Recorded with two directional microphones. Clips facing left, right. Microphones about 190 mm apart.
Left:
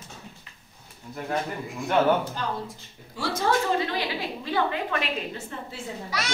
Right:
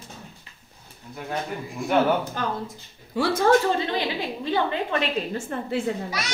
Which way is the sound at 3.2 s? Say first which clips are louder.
Right 6 dB; 55° right (ahead or behind).